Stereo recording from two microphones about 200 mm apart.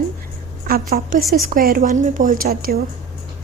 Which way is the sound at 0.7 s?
50° right (ahead or behind).